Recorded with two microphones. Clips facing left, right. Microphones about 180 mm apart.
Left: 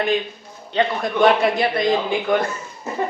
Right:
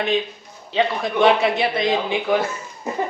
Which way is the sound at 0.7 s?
Centre (ahead or behind).